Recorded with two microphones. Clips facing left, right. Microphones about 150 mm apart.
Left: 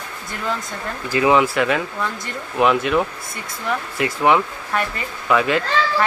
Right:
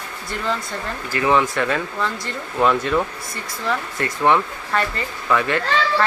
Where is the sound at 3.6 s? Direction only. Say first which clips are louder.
Left 1 dB; 10° left (ahead or behind).